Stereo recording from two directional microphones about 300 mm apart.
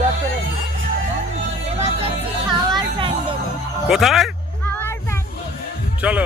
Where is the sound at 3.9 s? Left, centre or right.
Centre.